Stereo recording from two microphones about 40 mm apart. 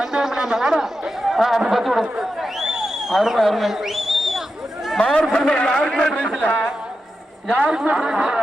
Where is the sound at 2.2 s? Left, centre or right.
Centre.